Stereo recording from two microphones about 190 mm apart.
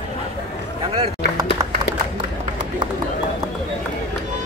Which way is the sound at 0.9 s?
30° right (ahead or behind).